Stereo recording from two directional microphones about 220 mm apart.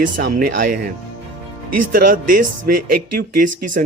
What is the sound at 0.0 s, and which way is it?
Speech, 40° right (ahead or behind).